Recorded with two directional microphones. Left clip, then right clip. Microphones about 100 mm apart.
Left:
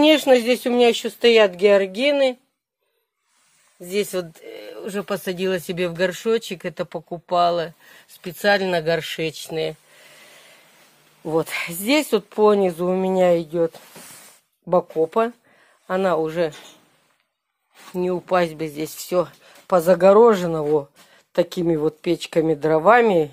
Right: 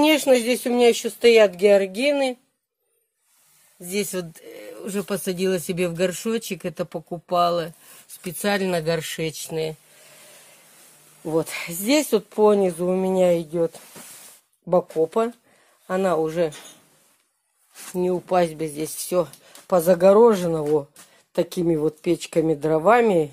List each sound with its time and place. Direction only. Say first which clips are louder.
0.0 s speech: left 3 dB; 10° right (ahead or behind)
3.8 s speech: left 3 dB; centre (ahead or behind)
11.2 s speech: left 2 dB; 20° right (ahead or behind)
15.0 s speech: left 2 dB; 15° right (ahead or behind)
17.9 s speech: left 1 dB; 25° right (ahead or behind)